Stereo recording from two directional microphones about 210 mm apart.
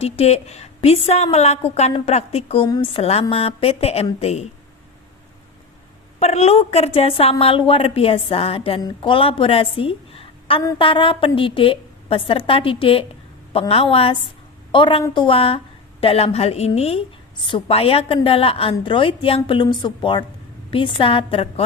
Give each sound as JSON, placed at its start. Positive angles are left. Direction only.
{"t": 0.0, "sound": "a woman's voice", "side_deg": 30}
{"t": 6.1, "sound": "a woman's voice", "side_deg": 30}